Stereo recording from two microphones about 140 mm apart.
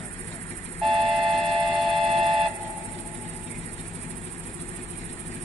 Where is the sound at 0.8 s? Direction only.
Centre (ahead or behind).